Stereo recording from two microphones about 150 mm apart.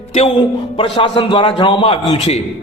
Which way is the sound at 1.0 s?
35° left (ahead or behind).